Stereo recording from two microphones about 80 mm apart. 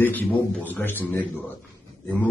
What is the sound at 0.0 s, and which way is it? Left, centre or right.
A man's voice, left.